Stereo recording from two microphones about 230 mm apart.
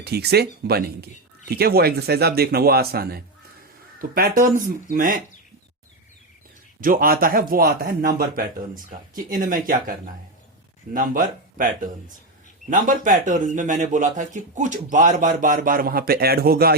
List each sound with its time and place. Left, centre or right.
0.0 s speech: right
6.8 s speech: right
10.9 s speech: right